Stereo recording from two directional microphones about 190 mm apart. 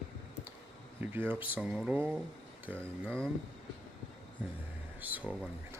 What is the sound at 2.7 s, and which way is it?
Speech, 5° left (ahead or behind).